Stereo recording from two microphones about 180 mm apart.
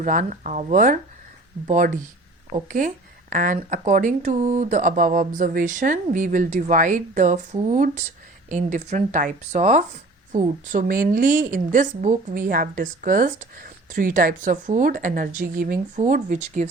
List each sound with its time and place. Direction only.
0.0 s speech: 45° right (ahead or behind)